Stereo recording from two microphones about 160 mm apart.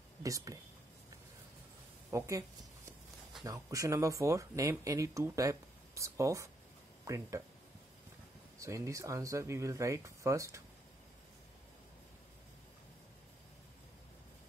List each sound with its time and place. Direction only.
0.2 s speech: 20° right (ahead or behind)
2.0 s speech: 20° right (ahead or behind)
8.5 s speech: 20° right (ahead or behind)